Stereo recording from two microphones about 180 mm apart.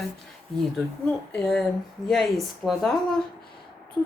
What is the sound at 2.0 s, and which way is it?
Speech, centre (ahead or behind).